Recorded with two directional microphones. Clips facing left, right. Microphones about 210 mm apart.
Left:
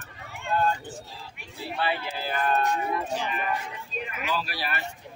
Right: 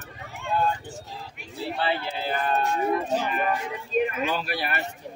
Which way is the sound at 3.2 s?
45° right (ahead or behind).